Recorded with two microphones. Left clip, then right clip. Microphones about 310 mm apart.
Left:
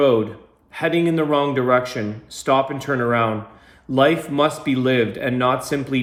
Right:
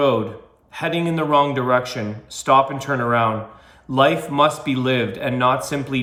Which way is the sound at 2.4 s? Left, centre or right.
Right.